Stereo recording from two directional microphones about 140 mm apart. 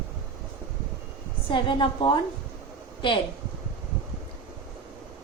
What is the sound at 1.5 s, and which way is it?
Female singing, 35° left (ahead or behind).